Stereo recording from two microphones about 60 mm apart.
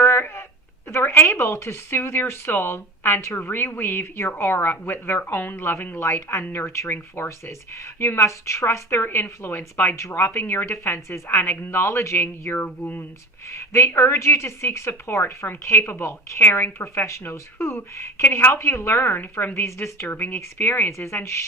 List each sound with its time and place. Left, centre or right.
0.0 s a sound: left
1.3 s a woman's voice: left
9.9 s a woman's voice: left
13.5 s speech: left
19.5 s a woman's voice: left